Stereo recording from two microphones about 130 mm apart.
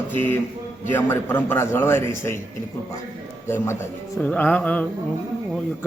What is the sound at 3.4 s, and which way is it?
A man's voice, 20° left (ahead or behind).